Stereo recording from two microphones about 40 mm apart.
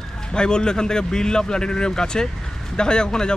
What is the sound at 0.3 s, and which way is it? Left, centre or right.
Speech, left.